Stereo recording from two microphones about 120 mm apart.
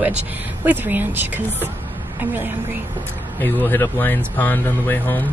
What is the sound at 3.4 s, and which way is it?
Speech, 20° left (ahead or behind).